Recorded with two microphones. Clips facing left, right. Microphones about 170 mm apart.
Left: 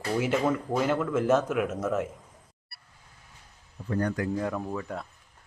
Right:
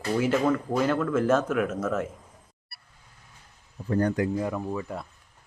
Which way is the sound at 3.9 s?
30° right (ahead or behind).